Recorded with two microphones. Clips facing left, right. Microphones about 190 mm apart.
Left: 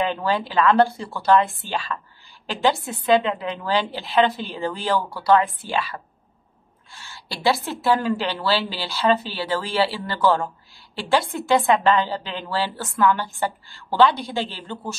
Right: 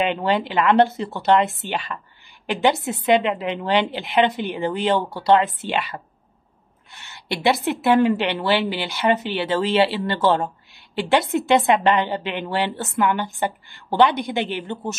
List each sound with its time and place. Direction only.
0.0 s a woman's voice: 20° right (ahead or behind)